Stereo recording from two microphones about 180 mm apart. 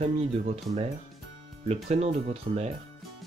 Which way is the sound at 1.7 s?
35° right (ahead or behind).